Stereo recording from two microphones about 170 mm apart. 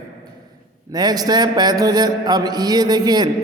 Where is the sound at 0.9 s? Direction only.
25° right (ahead or behind).